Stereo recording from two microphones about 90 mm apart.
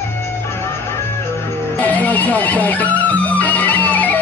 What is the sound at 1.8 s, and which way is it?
Speech, 15° left (ahead or behind).